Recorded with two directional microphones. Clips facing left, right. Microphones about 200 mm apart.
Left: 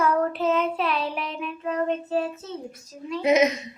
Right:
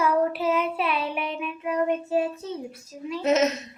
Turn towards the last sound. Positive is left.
turn(degrees=10)  # may be behind; listen again after turning